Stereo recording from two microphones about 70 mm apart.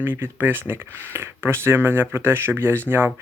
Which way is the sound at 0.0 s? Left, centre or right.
Right.